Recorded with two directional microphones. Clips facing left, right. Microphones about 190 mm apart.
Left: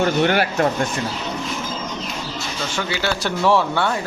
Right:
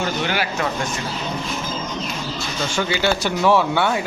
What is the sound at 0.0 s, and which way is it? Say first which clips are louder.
Speech: left 5 dB; 55° left (ahead or behind).